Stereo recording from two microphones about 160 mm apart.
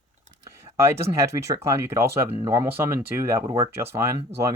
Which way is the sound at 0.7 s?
15° right (ahead or behind).